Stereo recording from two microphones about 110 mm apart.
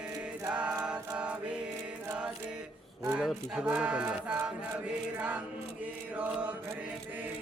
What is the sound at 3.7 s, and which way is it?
Mantra, 10° right (ahead or behind).